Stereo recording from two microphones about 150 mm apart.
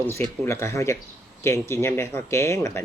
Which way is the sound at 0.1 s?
15° left (ahead or behind).